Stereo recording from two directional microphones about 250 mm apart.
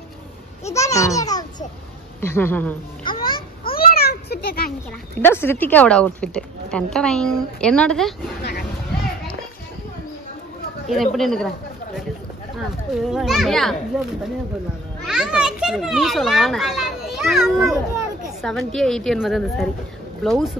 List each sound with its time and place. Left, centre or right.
0.7 s babbling: centre
2.2 s a woman's voice: centre
3.1 s a child's voice: centre
3.7 s a sound: left
5.2 s a woman's voice: centre
8.4 s a sound: left
10.9 s a woman's voice: centre